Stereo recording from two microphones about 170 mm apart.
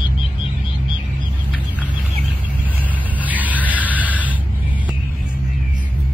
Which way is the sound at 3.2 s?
10° right (ahead or behind).